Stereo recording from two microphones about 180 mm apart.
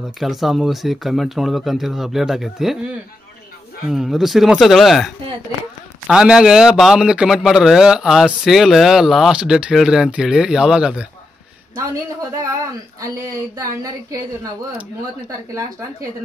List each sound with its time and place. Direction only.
0.2 s a man's voice: centre (ahead or behind)
3.9 s a man's voice: centre (ahead or behind)
11.7 s a woman's voice: 20° right (ahead or behind)